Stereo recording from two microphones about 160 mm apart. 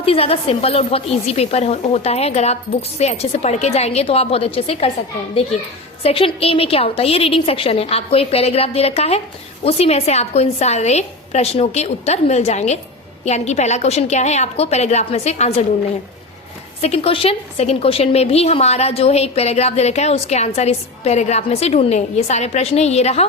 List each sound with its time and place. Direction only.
0.0 s a woman's voice: 35° left (ahead or behind)
6.0 s a woman's voice: 35° left (ahead or behind)
16.8 s a woman's voice: 40° left (ahead or behind)